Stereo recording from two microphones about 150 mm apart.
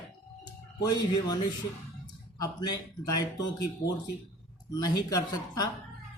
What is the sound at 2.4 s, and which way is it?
Speech, 25° left (ahead or behind).